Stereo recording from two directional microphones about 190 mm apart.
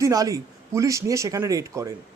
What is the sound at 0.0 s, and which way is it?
Speech, 20° right (ahead or behind).